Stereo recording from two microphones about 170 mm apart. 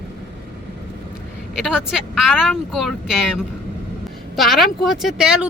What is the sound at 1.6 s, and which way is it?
Speech, centre (ahead or behind).